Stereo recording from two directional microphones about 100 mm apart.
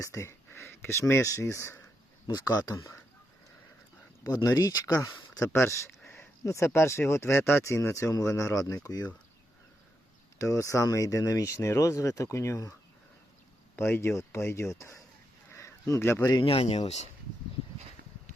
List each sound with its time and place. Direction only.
0.0 s speech: 30° left (ahead or behind)
2.2 s speech: 40° left (ahead or behind)
4.4 s speech: 40° left (ahead or behind)
5.5 s speech: 25° left (ahead or behind)
6.1 s a sound: 30° left (ahead or behind)
6.7 s speech: 25° left (ahead or behind)
10.3 s speech: 30° left (ahead or behind)
13.7 s speech: 25° left (ahead or behind)
15.5 s a sound: 30° left (ahead or behind)
16.4 s speech: 70° left (ahead or behind); by 17.1 s 90° left